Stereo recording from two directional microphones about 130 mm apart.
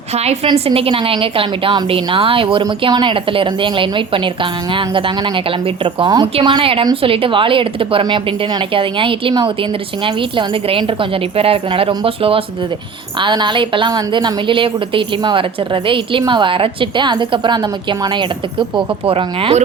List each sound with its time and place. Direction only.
0.1 s a woman's voice: 55° right (ahead or behind)